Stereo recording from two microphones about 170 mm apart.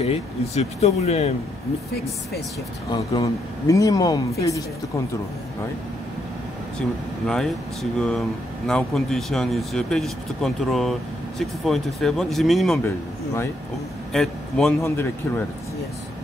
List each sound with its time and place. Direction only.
0.0 s speech: 40° left (ahead or behind)
2.9 s speech: 25° left (ahead or behind)
7.2 s speech: centre (ahead or behind)
12.8 s speech: 15° left (ahead or behind)
14.1 s a man's voice: centre (ahead or behind)
14.8 s speech: 15° left (ahead or behind)